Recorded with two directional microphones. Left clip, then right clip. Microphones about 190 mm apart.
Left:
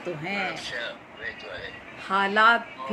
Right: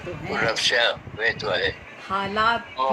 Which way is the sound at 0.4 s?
50° right (ahead or behind).